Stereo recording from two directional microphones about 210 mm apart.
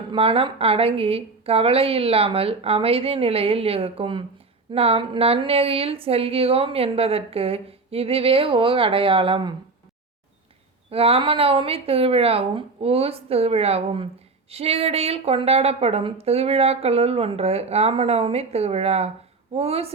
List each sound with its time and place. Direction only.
0.1 s speech: 25° right (ahead or behind)
10.9 s speech: 25° right (ahead or behind)